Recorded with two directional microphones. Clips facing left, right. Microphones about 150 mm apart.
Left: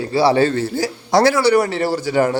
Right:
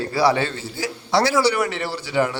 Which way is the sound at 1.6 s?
35° left (ahead or behind).